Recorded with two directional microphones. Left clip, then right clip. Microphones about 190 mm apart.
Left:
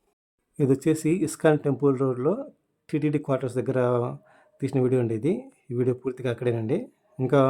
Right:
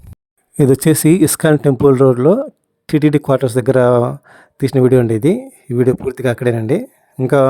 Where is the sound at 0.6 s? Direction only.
55° right (ahead or behind).